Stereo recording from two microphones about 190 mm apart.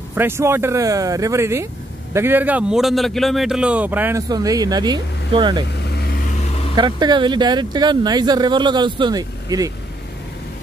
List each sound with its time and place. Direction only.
0.1 s a man's voice: 10° right (ahead or behind)
6.7 s speech: 25° right (ahead or behind)